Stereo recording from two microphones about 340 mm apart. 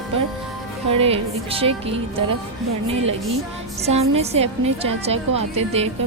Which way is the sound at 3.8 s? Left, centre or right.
Centre.